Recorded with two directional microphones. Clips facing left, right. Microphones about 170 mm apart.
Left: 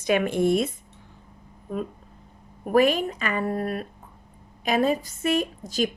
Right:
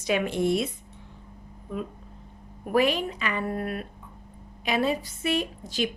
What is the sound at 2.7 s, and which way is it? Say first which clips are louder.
A woman's voice: left 3 dB; 45° left (ahead or behind).